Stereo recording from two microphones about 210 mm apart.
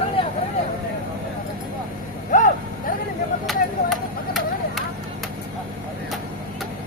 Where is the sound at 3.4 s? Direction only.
Centre (ahead or behind).